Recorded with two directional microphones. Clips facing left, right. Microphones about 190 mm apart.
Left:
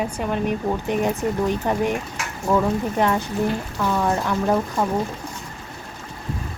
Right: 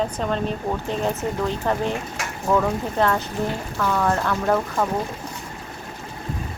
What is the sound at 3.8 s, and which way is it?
Speech, 15° left (ahead or behind).